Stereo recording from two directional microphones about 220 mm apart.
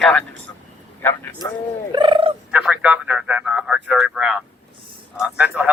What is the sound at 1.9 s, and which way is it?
Turkey, 20° right (ahead or behind).